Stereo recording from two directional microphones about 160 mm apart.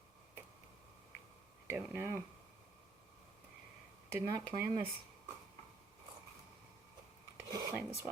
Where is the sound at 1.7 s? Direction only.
15° right (ahead or behind).